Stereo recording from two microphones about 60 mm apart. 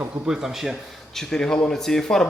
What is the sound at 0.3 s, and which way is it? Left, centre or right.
Speech, centre.